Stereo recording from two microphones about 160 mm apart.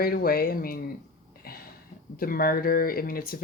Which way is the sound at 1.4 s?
70° left (ahead or behind).